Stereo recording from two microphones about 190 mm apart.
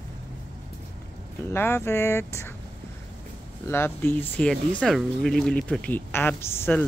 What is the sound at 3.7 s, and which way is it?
Speech, 10° left (ahead or behind).